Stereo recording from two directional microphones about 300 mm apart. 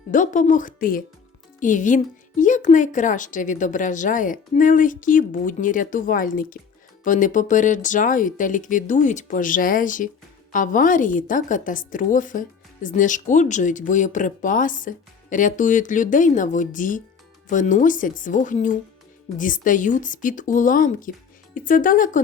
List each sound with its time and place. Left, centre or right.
0.1 s speech: left